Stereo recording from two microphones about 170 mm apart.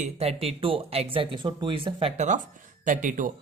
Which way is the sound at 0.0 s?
35° right (ahead or behind).